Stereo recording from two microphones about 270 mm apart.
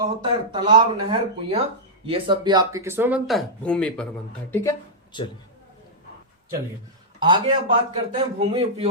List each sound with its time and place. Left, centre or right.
0.0 s speech: centre
5.1 s speech: centre
7.2 s speech: centre